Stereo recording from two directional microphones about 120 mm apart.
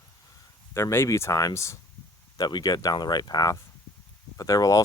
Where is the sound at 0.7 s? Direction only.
20° left (ahead or behind).